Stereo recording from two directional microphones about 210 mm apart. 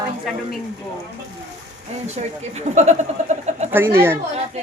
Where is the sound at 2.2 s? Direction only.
35° right (ahead or behind).